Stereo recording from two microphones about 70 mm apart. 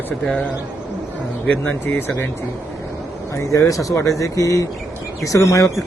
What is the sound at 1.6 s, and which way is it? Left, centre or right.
Speech, left.